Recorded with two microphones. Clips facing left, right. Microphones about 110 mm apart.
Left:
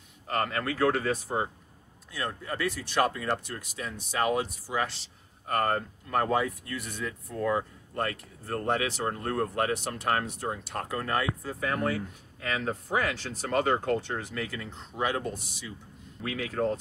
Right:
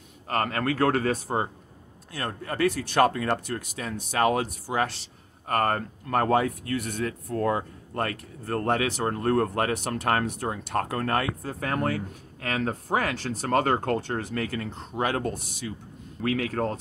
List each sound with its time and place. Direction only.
0.3 s speech: 55° right (ahead or behind)